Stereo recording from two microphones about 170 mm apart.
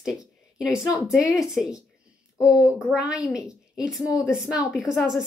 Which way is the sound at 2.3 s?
20° left (ahead or behind).